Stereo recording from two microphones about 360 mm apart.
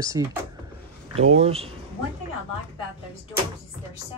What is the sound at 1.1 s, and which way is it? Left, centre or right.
Speech, right.